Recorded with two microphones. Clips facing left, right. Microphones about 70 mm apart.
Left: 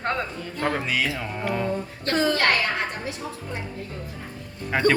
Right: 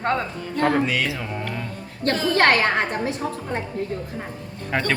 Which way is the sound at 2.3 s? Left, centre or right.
Right.